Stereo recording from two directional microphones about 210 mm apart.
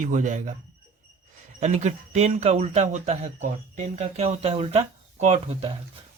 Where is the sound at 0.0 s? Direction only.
35° right (ahead or behind).